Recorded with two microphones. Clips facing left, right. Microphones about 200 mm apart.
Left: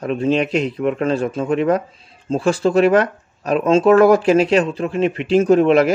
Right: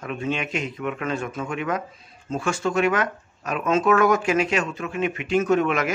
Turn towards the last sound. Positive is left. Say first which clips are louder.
# left 9 dB
turn(degrees=35)  # may be behind; listen again after turning